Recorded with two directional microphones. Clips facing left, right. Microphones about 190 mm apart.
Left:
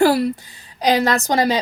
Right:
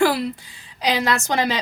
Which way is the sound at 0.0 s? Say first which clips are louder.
Left 4 dB; 45° left (ahead or behind).